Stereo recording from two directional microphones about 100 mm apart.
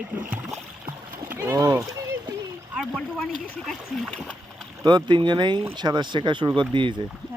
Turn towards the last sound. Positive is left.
turn(degrees=-50)  # may be behind; listen again after turning